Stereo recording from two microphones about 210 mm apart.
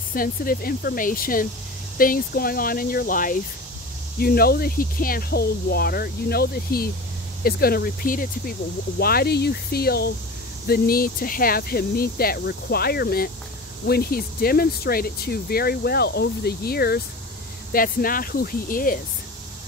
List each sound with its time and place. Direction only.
0.1 s speech: 45° left (ahead or behind)